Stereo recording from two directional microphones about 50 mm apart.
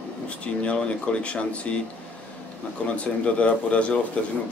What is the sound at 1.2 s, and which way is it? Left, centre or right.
Speech, left.